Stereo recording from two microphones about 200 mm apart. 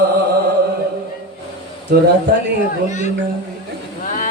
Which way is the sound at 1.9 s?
55° right (ahead or behind).